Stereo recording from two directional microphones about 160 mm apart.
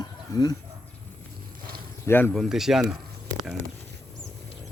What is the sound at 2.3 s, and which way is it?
Speech, centre (ahead or behind).